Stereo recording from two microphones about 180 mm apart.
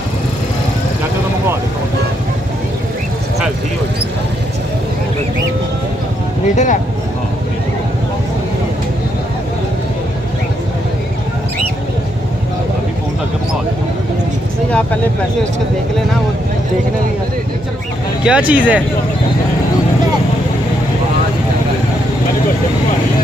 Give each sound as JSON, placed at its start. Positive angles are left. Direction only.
{"t": 6.5, "sound": "speech", "side_deg": 40}
{"t": 18.2, "sound": "speech", "side_deg": -5}